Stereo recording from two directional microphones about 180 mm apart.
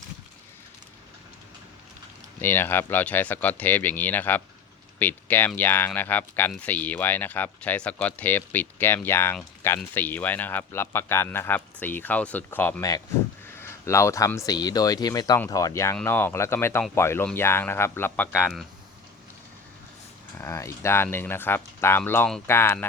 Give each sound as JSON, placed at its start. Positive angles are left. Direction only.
{"t": 2.4, "sound": "speech", "side_deg": 10}
{"t": 20.4, "sound": "speech", "side_deg": 15}